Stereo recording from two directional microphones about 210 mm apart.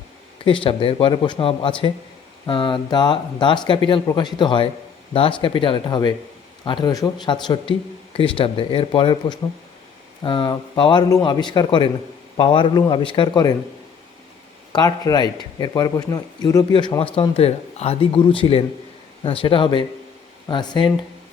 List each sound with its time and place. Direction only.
0.4 s speech: 25° left (ahead or behind)
14.7 s speech: 20° left (ahead or behind)